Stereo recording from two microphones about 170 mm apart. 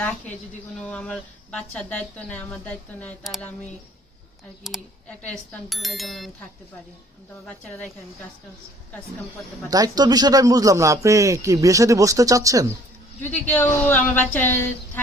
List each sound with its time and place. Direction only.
0.0 s speech: 5° left (ahead or behind)
4.6 s speech: 5° left (ahead or behind)
7.4 s speech: 5° left (ahead or behind)
9.6 s speech: 20° right (ahead or behind)
13.3 s speech: 10° left (ahead or behind)